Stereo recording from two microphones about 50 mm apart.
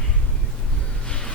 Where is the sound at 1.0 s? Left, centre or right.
Centre.